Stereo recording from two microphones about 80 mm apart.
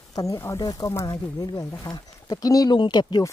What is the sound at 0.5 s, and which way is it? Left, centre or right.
Speech, left.